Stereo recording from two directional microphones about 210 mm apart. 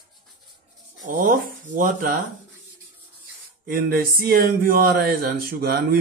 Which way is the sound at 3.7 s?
45° right (ahead or behind).